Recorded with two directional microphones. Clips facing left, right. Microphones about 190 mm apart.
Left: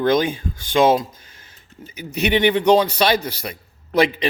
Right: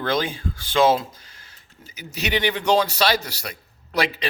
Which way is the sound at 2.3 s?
20° left (ahead or behind).